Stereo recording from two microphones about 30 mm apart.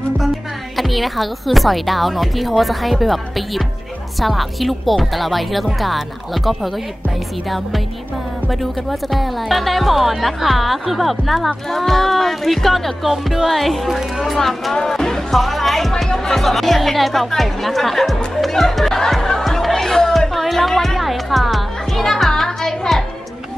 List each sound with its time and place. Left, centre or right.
0.7 s speech: centre
9.1 s speech: centre
14.3 s speech: centre
14.8 s music: centre
15.3 s speech: centre
16.1 s speech: centre
16.3 s speech: centre
18.3 s music: centre